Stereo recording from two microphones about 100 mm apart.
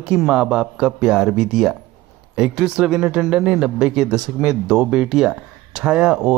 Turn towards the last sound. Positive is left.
turn(degrees=-10)  # may be behind; listen again after turning